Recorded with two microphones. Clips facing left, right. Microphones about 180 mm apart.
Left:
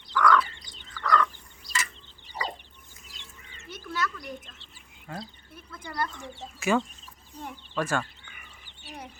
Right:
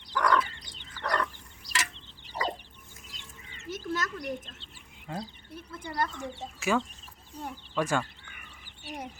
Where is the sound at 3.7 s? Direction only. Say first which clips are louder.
Even; 45° right (ahead or behind).